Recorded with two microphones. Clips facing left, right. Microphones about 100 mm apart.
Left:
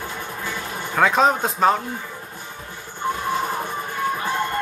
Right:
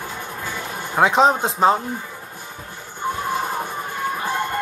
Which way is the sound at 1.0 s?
20° right (ahead or behind).